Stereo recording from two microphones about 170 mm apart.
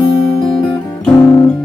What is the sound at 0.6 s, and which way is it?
Music, 5° left (ahead or behind).